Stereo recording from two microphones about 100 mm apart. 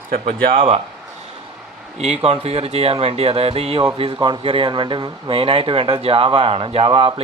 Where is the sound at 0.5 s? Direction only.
75° right (ahead or behind).